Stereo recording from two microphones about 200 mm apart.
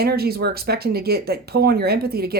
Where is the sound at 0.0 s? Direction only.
50° right (ahead or behind).